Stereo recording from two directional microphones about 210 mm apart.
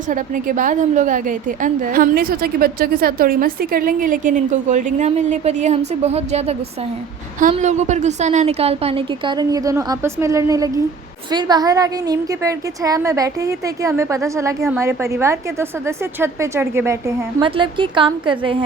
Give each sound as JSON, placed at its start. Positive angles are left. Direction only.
{"t": 0.1, "sound": "a woman's voice", "side_deg": -40}